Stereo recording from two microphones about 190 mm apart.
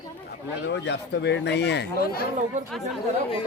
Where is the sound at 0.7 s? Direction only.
65° left (ahead or behind).